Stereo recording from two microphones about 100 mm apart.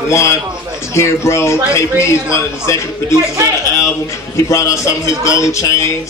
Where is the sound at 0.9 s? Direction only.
30° left (ahead or behind).